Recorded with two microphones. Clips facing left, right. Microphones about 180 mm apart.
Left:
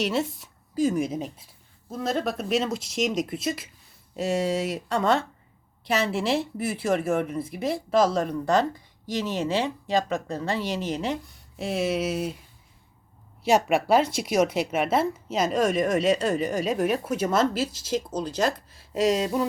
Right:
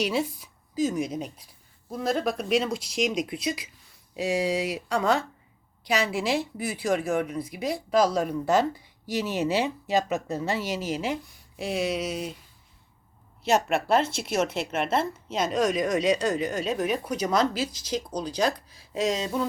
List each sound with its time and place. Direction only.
0.0 s speech: centre (ahead or behind)
13.4 s a woman's voice: 10° left (ahead or behind)